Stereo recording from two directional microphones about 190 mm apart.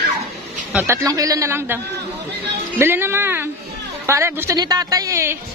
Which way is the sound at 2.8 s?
10° right (ahead or behind).